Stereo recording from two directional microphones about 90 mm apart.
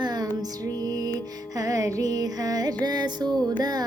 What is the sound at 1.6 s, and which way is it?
Music, 40° right (ahead or behind).